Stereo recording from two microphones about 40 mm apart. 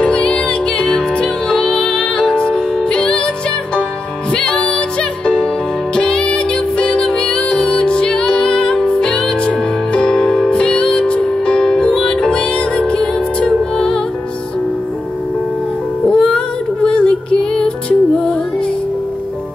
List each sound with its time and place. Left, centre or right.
0.0 s music: left
4.3 s music: left
16.1 s child singing: left